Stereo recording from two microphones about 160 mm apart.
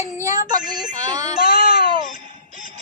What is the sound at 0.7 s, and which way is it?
Speech, 25° right (ahead or behind).